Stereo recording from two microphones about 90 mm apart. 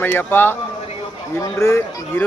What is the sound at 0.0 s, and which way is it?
A man's voice, 25° left (ahead or behind).